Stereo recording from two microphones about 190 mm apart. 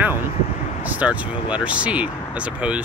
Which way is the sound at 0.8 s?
5° right (ahead or behind).